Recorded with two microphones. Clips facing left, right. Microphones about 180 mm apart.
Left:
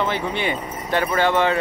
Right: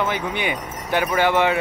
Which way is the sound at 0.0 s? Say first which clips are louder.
Left 1 dB; 5° right (ahead or behind).